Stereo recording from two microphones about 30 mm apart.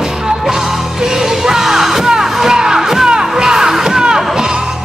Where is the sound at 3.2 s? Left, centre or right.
Right.